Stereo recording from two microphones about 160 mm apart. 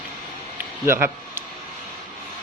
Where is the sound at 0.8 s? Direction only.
15° right (ahead or behind).